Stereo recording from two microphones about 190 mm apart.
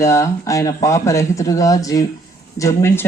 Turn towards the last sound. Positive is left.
turn(degrees=15)  # may be behind; listen again after turning